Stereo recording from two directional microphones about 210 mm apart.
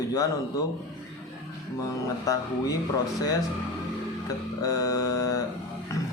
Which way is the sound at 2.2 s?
15° left (ahead or behind).